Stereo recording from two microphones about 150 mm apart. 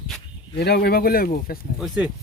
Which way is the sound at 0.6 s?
90° left.